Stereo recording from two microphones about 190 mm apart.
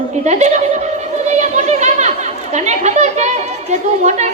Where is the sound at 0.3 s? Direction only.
35° right (ahead or behind).